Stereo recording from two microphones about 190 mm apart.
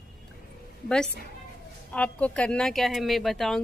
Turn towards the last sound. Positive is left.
turn(degrees=0)  # may be behind; listen again after turning